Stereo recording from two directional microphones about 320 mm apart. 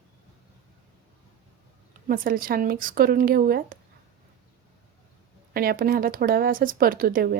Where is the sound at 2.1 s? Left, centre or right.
Right.